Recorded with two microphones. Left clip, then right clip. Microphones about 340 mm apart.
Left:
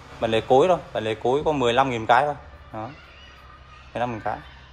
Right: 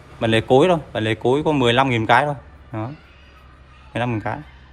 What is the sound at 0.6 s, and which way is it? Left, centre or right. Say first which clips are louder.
Speech: right 3 dB; right.